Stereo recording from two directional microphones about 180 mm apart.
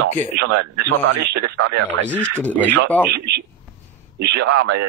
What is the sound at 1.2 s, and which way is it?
Speech, 70° right (ahead or behind).